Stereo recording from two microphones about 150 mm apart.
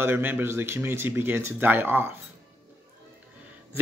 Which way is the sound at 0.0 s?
15° right (ahead or behind).